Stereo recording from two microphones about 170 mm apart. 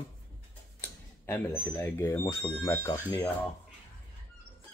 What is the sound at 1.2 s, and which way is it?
Speech, 15° left (ahead or behind).